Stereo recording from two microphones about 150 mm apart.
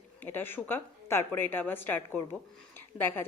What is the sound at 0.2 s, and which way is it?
A woman's voice, 15° left (ahead or behind).